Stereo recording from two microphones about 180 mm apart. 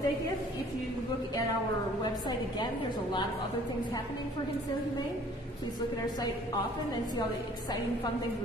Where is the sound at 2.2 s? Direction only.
25° left (ahead or behind).